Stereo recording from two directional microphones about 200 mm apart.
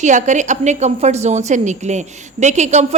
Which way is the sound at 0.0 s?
35° right (ahead or behind).